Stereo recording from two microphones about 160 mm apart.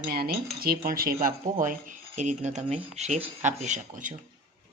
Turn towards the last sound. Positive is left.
turn(degrees=-55)  # may be behind; listen again after turning